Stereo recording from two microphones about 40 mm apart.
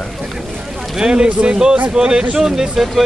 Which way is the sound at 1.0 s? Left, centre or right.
Centre.